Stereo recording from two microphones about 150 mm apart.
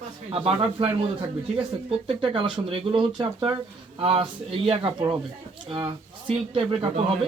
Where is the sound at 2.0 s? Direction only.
35° right (ahead or behind).